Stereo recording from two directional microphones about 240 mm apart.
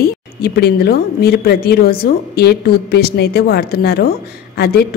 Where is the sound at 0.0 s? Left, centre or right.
Left.